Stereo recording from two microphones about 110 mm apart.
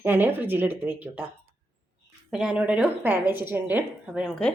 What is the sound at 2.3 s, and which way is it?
A woman's voice, 10° right (ahead or behind).